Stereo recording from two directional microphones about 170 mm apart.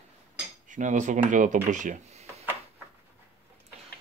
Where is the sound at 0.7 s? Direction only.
45° right (ahead or behind).